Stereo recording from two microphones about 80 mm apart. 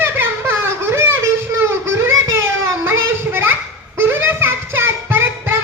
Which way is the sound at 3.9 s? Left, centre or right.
Right.